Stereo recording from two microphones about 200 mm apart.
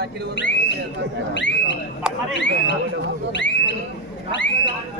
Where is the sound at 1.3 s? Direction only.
65° left (ahead or behind).